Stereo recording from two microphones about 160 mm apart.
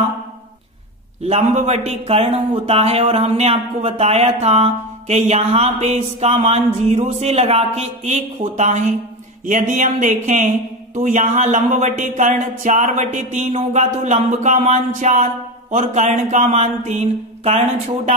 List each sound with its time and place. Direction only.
1.2 s speech: 40° right (ahead or behind)